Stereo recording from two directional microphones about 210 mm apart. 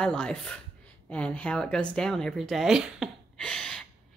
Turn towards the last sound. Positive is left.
turn(degrees=5)  # may be behind; listen again after turning